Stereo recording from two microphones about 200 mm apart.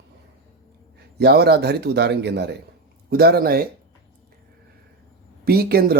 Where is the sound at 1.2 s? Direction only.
50° right (ahead or behind).